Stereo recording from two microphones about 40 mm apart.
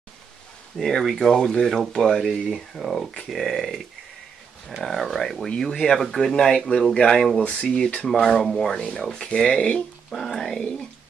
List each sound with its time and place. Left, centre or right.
0.7 s speech: centre
4.8 s speech: centre
6.3 s speech: centre
7.4 s speech: left
8.2 s speech: centre
8.5 s speech: centre
8.7 s speech: centre
10.1 s speech: centre